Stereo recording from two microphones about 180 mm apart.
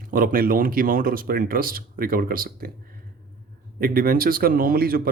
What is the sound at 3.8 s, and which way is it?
A man's voice, 55° right (ahead or behind).